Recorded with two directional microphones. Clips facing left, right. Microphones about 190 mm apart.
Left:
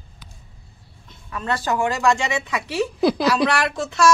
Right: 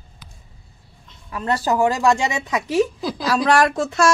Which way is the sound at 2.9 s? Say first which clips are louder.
Left 4 dB; 70° left (ahead or behind).